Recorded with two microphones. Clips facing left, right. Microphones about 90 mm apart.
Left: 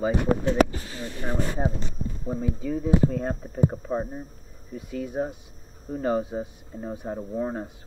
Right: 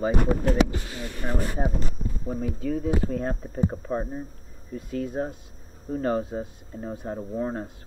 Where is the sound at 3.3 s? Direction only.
20° left (ahead or behind).